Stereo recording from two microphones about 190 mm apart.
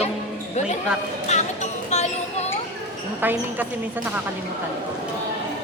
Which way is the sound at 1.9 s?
35° left (ahead or behind).